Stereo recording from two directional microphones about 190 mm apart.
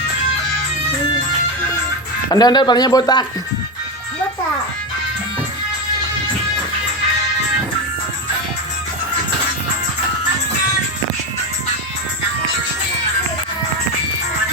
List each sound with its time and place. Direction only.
2.3 s speech: 20° left (ahead or behind)